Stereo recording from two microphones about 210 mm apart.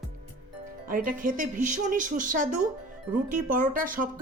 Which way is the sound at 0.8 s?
40° right (ahead or behind).